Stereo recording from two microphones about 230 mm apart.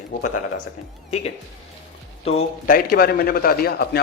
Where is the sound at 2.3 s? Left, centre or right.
Left.